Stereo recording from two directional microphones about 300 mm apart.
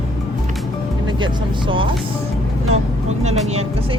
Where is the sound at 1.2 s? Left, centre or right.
Centre.